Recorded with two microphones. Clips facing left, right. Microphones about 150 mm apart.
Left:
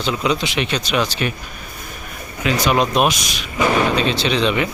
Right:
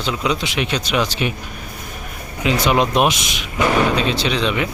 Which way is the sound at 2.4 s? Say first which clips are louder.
Right 1 dB; 25° right (ahead or behind).